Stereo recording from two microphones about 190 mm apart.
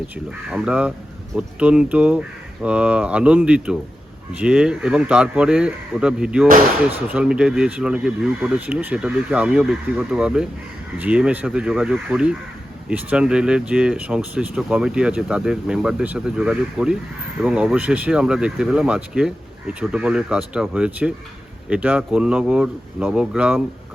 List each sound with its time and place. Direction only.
0.3 s speech: 5° right (ahead or behind)